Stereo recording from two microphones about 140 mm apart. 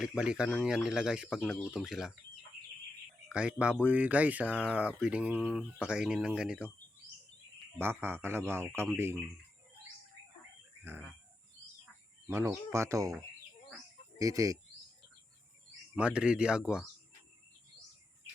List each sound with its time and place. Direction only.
0.0 s speech: 5° right (ahead or behind)
3.2 s speech: 5° right (ahead or behind)
7.8 s speech: 15° right (ahead or behind)
12.3 s speech: 20° right (ahead or behind)
14.2 s speech: 25° right (ahead or behind)
16.0 s speech: 10° right (ahead or behind)